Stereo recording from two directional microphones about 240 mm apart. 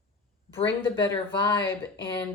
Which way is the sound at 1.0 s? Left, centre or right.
Centre.